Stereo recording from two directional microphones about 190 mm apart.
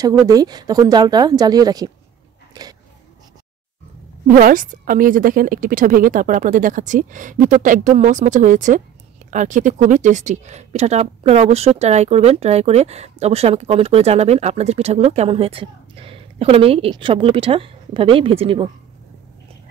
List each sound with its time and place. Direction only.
0.0 s speech: 20° right (ahead or behind)
2.6 s a sound: 20° right (ahead or behind)
4.3 s a woman's voice: 45° right (ahead or behind); by 18.7 s 30° right (ahead or behind)